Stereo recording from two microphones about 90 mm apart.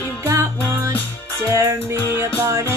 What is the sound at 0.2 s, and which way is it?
Music, 30° right (ahead or behind).